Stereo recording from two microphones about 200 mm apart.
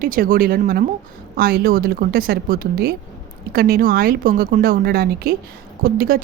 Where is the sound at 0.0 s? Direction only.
45° right (ahead or behind).